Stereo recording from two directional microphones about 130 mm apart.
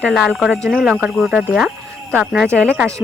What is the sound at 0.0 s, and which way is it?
Speech, centre (ahead or behind).